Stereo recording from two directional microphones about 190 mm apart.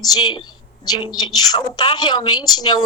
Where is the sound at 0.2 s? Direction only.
25° left (ahead or behind).